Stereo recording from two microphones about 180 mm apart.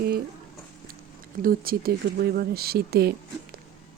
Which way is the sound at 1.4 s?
55° right (ahead or behind).